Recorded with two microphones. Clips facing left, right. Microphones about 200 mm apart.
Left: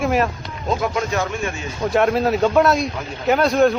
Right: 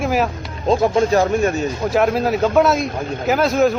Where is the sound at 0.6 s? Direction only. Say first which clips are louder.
Right 7 dB; 30° right (ahead or behind).